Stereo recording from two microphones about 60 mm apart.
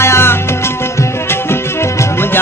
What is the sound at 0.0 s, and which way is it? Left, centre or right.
Music, left.